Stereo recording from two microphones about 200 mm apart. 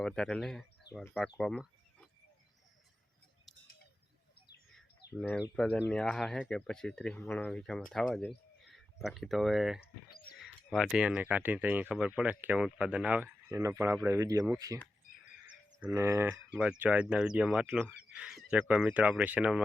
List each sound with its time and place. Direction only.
0.0 s speech: 5° left (ahead or behind)
5.2 s speech: 5° left (ahead or behind)
9.8 s speech: 50° left (ahead or behind)
10.4 s speech: centre (ahead or behind)
15.8 s speech: 15° right (ahead or behind)
18.1 s a sound: 5° right (ahead or behind)
18.7 s speech: 5° right (ahead or behind)